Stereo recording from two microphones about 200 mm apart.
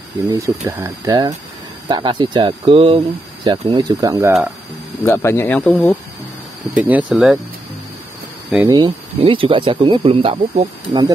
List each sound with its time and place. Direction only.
0.3 s speech: 15° right (ahead or behind)
5.0 s speech: 10° left (ahead or behind)
6.7 s speech: 5° right (ahead or behind)
8.6 s speech: 20° right (ahead or behind)